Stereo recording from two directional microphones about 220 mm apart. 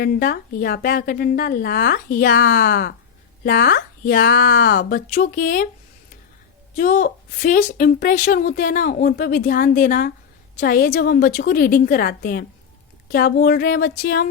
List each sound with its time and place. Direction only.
0.0 s a woman's voice: 40° left (ahead or behind)
6.7 s a woman's voice: 35° left (ahead or behind)